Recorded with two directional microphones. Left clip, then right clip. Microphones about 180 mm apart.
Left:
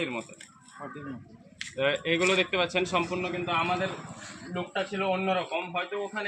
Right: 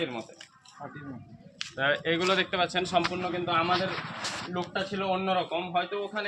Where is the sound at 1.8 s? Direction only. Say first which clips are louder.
Left 1 dB; 15° right (ahead or behind).